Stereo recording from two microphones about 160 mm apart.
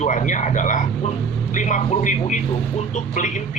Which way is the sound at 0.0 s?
50° left (ahead or behind).